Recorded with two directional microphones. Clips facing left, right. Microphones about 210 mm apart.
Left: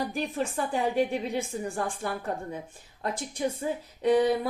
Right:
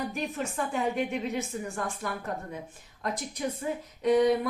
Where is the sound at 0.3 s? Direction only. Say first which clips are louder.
Left 3 dB; 35° left (ahead or behind).